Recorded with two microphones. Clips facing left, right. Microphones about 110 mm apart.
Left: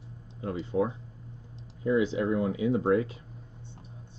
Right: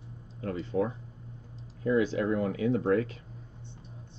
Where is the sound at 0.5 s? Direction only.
25° left (ahead or behind).